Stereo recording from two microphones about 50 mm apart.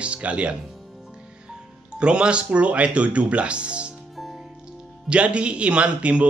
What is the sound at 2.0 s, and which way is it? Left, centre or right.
A man's voice, centre.